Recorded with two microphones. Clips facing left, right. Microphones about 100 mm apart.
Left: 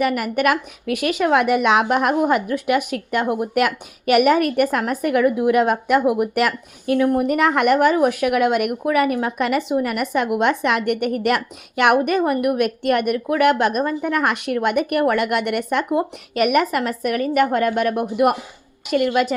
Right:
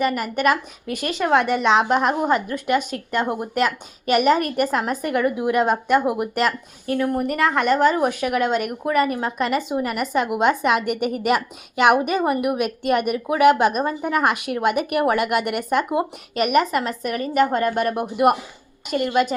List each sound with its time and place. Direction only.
0.0 s a woman's voice: 5° left (ahead or behind)
7.9 s a woman's voice: centre (ahead or behind)